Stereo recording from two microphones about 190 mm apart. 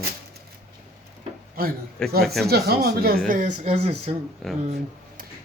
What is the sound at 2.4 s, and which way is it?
Speech, 55° right (ahead or behind).